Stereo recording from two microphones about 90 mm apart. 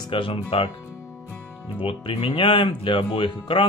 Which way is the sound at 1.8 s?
85° left.